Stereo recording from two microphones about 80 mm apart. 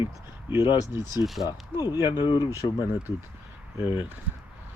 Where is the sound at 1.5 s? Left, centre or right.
Left.